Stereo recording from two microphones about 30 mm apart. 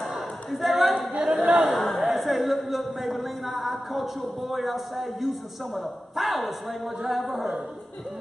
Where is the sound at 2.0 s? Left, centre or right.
Centre.